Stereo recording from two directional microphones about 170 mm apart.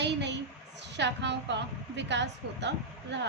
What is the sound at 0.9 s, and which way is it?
A woman's voice, 90° right.